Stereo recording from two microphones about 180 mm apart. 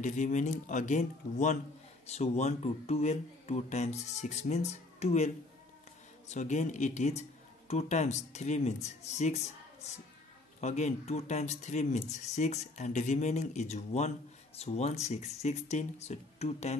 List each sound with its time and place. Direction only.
0.0 s a man's voice: 45° left (ahead or behind)
10.6 s speech: 40° left (ahead or behind)